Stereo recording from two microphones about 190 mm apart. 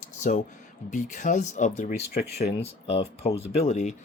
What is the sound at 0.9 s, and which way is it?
Speech, 40° left (ahead or behind).